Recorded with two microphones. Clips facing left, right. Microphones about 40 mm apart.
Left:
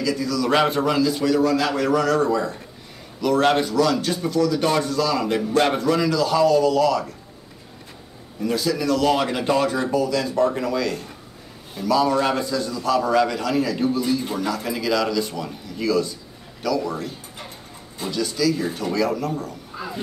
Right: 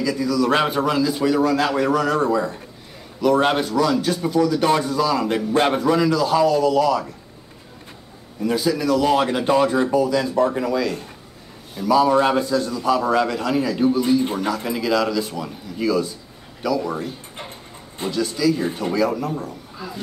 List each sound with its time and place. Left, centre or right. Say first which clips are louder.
0.0 s speech: right 3 dB; centre
8.4 s a man's voice: right 2 dB; centre
14.5 s speech: even; centre
18.1 s speech: right 2 dB; centre
19.7 s a sound: left 2 dB; centre